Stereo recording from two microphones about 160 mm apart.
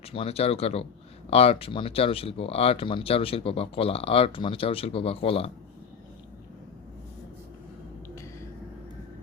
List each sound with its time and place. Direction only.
0.1 s speech: 40° left (ahead or behind)